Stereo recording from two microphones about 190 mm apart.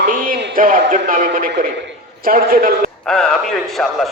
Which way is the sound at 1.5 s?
55° right (ahead or behind).